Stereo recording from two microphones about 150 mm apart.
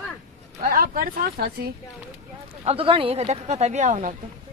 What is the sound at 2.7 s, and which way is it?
Speech, 40° right (ahead or behind).